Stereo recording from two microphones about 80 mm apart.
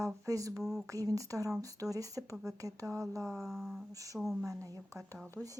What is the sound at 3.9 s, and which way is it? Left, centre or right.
Speech, right.